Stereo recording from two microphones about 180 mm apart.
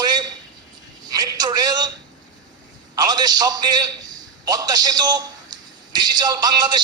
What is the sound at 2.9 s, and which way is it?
A man's voice, 20° right (ahead or behind).